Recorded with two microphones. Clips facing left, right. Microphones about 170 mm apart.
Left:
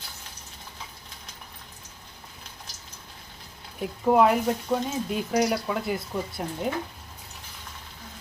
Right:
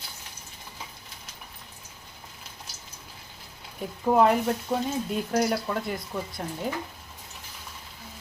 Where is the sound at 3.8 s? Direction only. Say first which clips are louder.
Left 1 dB; centre (ahead or behind).